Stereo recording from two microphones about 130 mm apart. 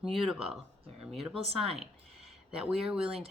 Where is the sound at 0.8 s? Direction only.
50° right (ahead or behind).